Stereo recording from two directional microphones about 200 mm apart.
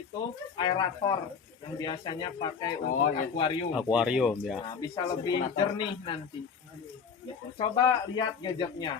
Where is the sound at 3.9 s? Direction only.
5° right (ahead or behind).